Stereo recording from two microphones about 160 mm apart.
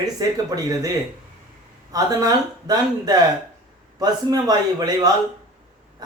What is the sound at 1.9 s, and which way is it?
Speech, 25° right (ahead or behind).